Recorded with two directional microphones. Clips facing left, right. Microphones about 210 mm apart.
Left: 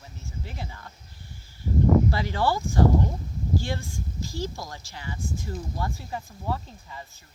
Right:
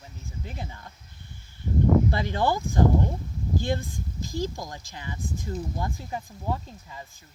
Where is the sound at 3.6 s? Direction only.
20° right (ahead or behind).